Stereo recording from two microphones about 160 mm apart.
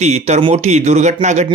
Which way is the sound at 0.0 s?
45° right (ahead or behind).